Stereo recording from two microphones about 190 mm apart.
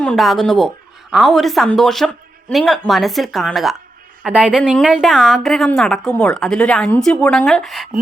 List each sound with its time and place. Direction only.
0.0 s a woman's voice: 5° left (ahead or behind)